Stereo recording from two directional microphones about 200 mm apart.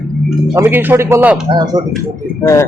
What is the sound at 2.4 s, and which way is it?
Speech, 15° left (ahead or behind).